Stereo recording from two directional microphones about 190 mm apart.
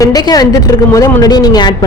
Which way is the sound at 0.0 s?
20° left (ahead or behind).